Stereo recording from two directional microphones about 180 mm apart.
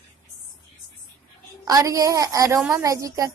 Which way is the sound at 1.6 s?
20° right (ahead or behind).